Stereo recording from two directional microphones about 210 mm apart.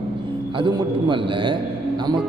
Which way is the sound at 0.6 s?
25° right (ahead or behind).